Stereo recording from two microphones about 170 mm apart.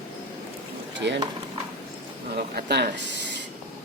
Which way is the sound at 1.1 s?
90° right.